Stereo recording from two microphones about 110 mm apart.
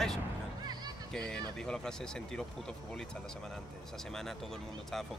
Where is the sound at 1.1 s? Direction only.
5° left (ahead or behind).